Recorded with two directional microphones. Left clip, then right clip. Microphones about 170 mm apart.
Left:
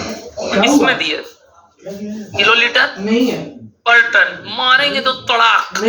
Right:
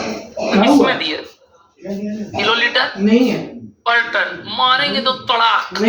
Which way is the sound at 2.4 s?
15° left (ahead or behind).